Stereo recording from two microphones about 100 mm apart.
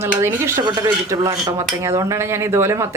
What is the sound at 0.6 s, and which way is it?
A man's voice, 45° right (ahead or behind).